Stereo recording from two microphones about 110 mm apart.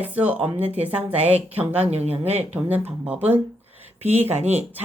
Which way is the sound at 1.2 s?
70° right (ahead or behind).